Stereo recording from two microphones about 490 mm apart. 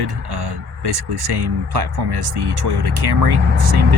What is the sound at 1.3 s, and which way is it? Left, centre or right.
Speech, right.